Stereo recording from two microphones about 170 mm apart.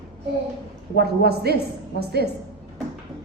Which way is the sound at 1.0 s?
70° right (ahead or behind).